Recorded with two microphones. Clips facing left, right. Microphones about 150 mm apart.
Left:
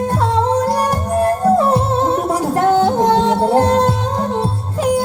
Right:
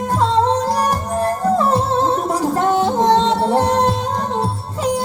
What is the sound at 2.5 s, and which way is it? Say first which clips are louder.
Music: left 4 dB; 65° left (ahead or behind).